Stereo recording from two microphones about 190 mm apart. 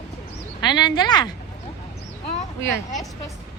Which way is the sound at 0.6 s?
20° left (ahead or behind).